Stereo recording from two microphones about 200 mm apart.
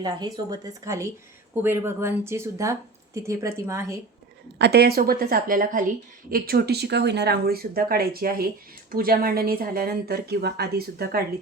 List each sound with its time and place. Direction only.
0.0 s speech: 20° right (ahead or behind)
4.5 s a woman's voice: 55° right (ahead or behind)